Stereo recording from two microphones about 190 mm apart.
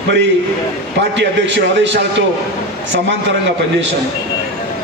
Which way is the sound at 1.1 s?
70° right (ahead or behind).